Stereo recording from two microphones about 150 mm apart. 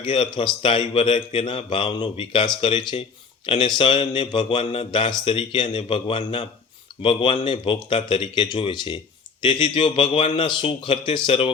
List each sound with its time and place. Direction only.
0.3 s speech: 35° left (ahead or behind)